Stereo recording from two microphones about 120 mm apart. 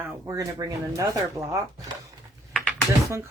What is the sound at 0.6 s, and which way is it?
Speech, 35° right (ahead or behind).